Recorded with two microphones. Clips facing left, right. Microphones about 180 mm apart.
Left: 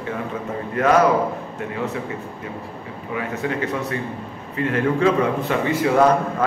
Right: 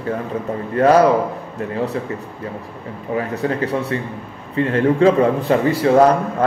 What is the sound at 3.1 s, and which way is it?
A man's voice, 35° right (ahead or behind).